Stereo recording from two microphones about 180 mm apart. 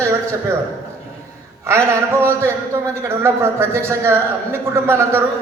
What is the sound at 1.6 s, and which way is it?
A man's voice, 15° right (ahead or behind).